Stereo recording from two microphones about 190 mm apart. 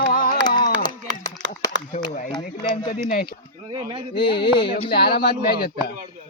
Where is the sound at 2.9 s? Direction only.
50° left (ahead or behind).